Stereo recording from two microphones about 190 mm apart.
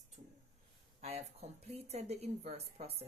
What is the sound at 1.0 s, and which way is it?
Speech, 35° right (ahead or behind).